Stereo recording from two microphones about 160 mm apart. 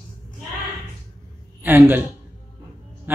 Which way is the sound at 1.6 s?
15° right (ahead or behind).